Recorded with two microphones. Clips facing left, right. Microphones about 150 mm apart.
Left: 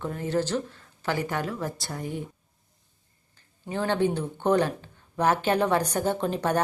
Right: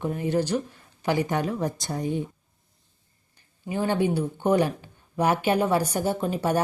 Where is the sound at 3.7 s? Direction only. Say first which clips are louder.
Right 1 dB; 10° right (ahead or behind).